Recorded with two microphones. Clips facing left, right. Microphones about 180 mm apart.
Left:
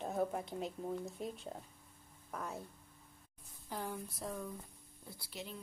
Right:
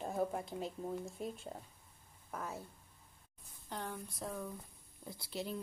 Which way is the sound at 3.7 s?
5° left (ahead or behind).